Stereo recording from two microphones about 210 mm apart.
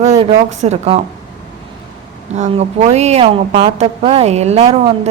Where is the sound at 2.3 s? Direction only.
35° right (ahead or behind).